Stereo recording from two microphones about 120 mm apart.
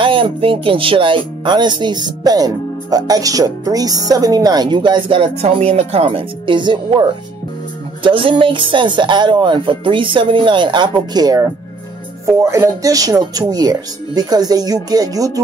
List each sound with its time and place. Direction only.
0.0 s a woman's voice: 45° right (ahead or behind); by 15.4 s 30° right (ahead or behind)